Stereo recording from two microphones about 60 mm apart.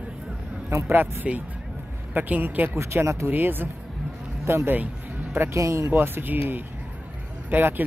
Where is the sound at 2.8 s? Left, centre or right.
Right.